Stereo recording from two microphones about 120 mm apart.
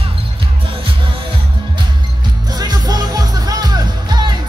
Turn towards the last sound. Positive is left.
turn(degrees=-35)  # may be behind; listen again after turning